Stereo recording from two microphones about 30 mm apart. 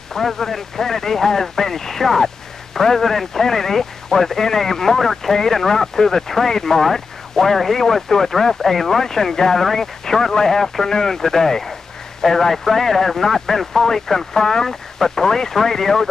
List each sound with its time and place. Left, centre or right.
0.1 s speech: centre